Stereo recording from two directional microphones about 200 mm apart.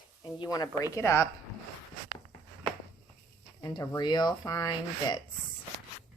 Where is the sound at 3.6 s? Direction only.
20° left (ahead or behind).